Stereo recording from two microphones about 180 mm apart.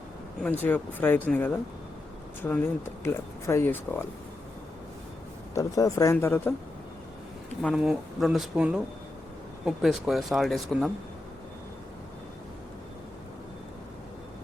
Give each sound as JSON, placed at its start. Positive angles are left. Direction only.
{"t": 0.4, "sound": "speech", "side_deg": 10}
{"t": 5.5, "sound": "speech", "side_deg": 20}
{"t": 7.6, "sound": "speech", "side_deg": 0}